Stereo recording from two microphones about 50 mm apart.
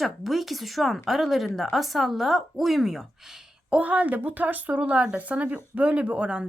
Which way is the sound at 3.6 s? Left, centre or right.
Right.